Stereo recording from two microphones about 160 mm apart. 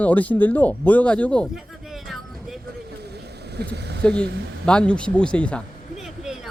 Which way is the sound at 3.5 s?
90° right.